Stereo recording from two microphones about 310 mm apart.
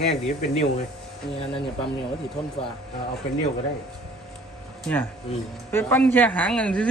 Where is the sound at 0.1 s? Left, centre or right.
Left.